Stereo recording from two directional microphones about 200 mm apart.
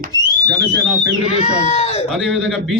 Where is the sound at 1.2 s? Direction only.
30° left (ahead or behind).